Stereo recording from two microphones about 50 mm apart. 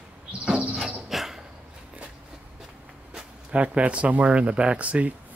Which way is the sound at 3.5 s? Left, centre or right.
Right.